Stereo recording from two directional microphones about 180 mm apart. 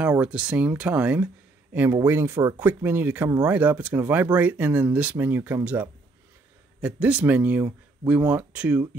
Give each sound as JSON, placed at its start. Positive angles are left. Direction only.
{"t": 0.0, "sound": "speech", "side_deg": -5}